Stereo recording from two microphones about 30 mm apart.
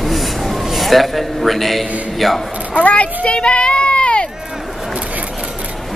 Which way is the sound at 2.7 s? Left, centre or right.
Left.